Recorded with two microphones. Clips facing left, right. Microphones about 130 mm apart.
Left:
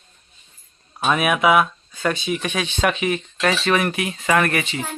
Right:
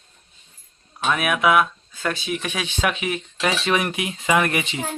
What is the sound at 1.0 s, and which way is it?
Speech, 5° left (ahead or behind).